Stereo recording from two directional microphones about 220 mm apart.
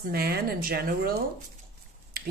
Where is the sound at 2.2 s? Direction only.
45° right (ahead or behind).